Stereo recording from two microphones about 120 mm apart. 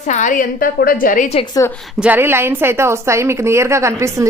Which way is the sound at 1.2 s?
65° left (ahead or behind).